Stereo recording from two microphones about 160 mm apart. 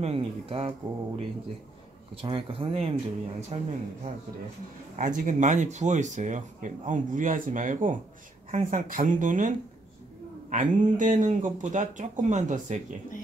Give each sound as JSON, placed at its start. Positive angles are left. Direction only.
{"t": 0.0, "sound": "speech", "side_deg": -40}
{"t": 2.2, "sound": "speech", "side_deg": -35}
{"t": 4.9, "sound": "speech", "side_deg": -55}
{"t": 10.5, "sound": "speech", "side_deg": -55}